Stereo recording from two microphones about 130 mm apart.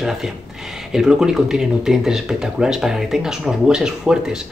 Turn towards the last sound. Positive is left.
turn(degrees=-5)  # may be behind; listen again after turning